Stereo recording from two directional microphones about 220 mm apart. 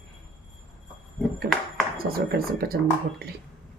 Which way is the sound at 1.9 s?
45° right (ahead or behind).